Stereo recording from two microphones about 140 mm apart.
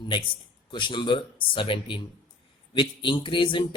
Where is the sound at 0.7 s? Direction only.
35° left (ahead or behind).